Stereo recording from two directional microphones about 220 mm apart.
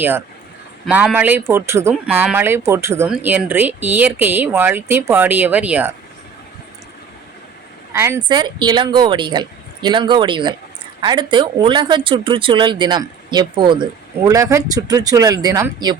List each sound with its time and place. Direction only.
0.9 s speech: 5° right (ahead or behind)
7.9 s speech: 10° right (ahead or behind)